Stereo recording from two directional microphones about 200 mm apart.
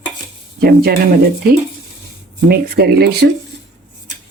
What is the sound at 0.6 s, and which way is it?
Speech, 50° right (ahead or behind).